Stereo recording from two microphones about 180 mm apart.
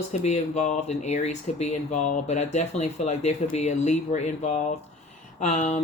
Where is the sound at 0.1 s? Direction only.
40° left (ahead or behind).